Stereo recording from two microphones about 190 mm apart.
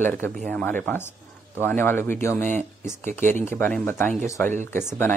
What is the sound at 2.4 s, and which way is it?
Speech, 40° right (ahead or behind).